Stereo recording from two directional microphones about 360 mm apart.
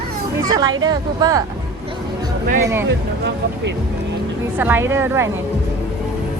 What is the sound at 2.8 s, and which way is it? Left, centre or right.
Speech, right.